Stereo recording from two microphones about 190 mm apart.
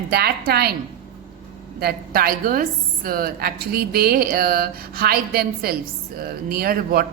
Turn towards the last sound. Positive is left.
turn(degrees=-50)  # may be behind; listen again after turning